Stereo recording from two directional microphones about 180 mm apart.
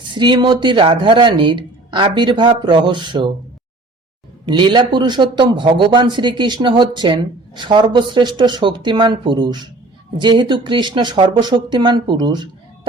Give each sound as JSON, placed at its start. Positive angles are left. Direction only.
{"t": 0.1, "sound": "a man's voice", "side_deg": -25}
{"t": 4.4, "sound": "a man's voice", "side_deg": -25}